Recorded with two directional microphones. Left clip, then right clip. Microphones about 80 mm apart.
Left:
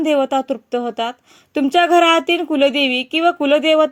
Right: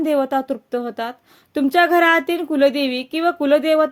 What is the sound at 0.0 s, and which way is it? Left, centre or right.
Speech, left.